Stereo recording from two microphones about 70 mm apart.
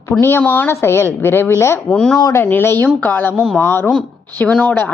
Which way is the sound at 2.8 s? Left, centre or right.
Left.